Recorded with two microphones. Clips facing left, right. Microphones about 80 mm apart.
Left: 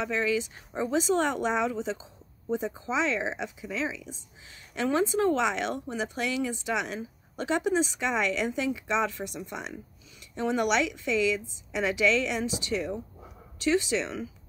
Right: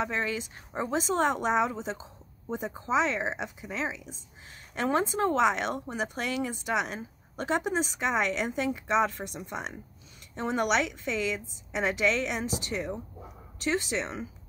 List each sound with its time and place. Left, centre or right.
0.0 s speech: right